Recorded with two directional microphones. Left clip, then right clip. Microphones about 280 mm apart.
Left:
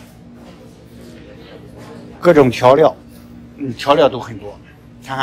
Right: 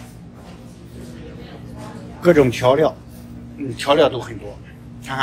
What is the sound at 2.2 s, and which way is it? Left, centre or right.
A man's voice, left.